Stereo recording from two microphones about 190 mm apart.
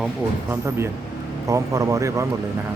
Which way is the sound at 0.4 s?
15° right (ahead or behind).